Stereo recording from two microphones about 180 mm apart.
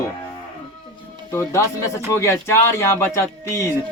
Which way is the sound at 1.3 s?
15° left (ahead or behind).